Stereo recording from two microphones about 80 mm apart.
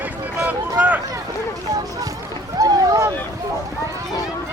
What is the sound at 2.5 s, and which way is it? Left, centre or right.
Speech, right.